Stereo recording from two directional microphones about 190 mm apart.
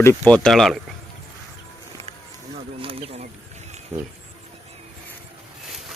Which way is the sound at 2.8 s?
30° right (ahead or behind).